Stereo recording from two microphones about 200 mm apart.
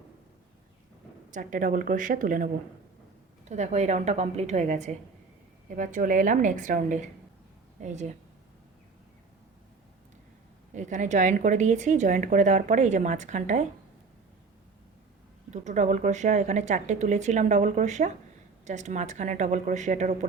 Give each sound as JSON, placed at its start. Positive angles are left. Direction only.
{"t": 1.3, "sound": "a woman's voice", "side_deg": -40}
{"t": 3.5, "sound": "a woman's voice", "side_deg": -35}
{"t": 10.8, "sound": "a woman's voice", "side_deg": -35}
{"t": 15.4, "sound": "a woman's voice", "side_deg": -35}